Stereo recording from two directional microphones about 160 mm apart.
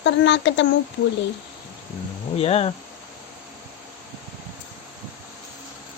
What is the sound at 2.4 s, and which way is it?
Speech, 40° left (ahead or behind).